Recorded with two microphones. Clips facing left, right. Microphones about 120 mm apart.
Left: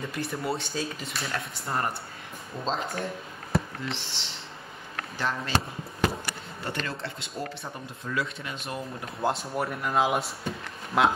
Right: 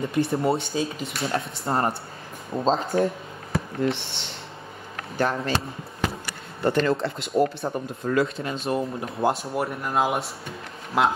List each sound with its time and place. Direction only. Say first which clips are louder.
0.0 s speech: right 9 dB; 25° right (ahead or behind)
2.5 s speech: right 9 dB; 35° right (ahead or behind)
3.8 s speech: right 10 dB; 55° right (ahead or behind)
6.6 s speech: right 12 dB; 50° right (ahead or behind)
8.4 s speech: right 9 dB; 30° right (ahead or behind)
9.3 s speech: right 3 dB; 5° right (ahead or behind)